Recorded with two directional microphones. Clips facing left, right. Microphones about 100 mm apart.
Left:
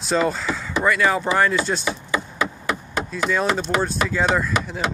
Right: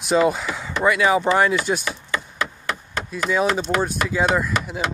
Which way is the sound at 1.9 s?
10° left (ahead or behind).